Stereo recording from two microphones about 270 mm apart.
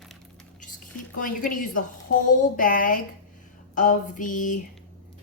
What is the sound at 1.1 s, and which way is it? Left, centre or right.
A woman's voice, left.